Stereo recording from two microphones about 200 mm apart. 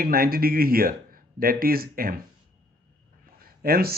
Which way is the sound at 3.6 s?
50° right (ahead or behind).